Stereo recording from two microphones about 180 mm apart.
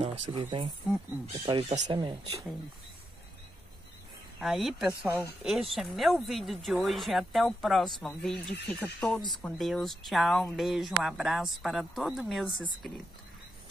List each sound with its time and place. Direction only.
0.0 s speech: 30° right (ahead or behind)
4.4 s speech: centre (ahead or behind)
5.6 s speech: centre (ahead or behind)